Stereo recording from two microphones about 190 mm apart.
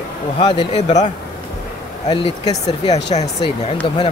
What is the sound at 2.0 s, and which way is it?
Speech, 25° left (ahead or behind).